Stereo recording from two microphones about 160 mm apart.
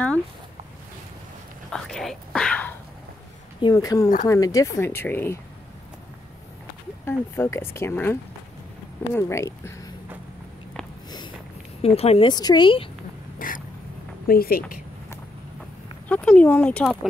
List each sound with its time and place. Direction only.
1.7 s whispering: 5° left (ahead or behind)
3.6 s speech: 25° left (ahead or behind)
7.1 s speech: 15° left (ahead or behind)
11.8 s speech: 40° left (ahead or behind)
12.3 s speech: 25° left (ahead or behind)
13.4 s vehicle: 60° left (ahead or behind)
14.2 s speech: 65° left (ahead or behind)
16.1 s speech: 5° left (ahead or behind)
16.8 s speech: centre (ahead or behind)